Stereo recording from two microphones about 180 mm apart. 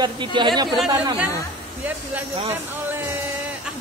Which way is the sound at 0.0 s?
25° right (ahead or behind).